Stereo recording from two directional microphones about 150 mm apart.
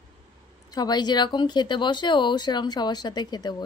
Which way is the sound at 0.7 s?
25° left (ahead or behind).